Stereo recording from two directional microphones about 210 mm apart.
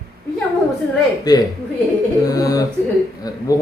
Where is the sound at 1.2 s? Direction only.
20° left (ahead or behind).